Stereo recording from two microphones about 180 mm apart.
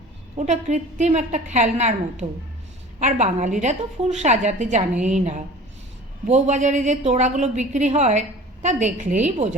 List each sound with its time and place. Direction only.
0.3 s a woman's voice: 40° right (ahead or behind)
3.0 s a woman's voice: 40° right (ahead or behind)